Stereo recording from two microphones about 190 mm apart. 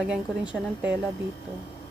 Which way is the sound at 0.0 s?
5° right (ahead or behind).